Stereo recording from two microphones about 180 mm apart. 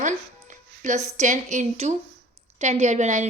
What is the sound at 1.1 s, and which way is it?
A woman's voice, 45° right (ahead or behind).